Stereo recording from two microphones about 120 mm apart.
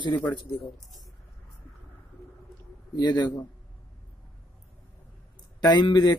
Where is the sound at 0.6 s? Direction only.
Centre (ahead or behind).